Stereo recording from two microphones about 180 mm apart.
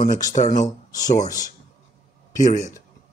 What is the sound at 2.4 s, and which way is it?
Speech, 45° left (ahead or behind).